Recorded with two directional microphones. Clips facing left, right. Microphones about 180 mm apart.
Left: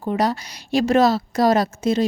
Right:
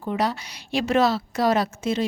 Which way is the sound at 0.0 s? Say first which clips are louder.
Left 4 dB; 40° left (ahead or behind).